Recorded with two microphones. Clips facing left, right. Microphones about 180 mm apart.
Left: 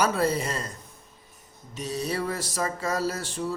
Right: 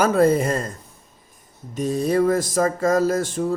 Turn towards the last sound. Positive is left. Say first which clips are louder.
# right 8 dB
turn(degrees=-50)  # may be behind; listen again after turning